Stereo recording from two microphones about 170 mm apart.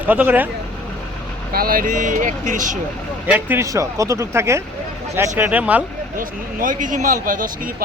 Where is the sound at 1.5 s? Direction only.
55° right (ahead or behind).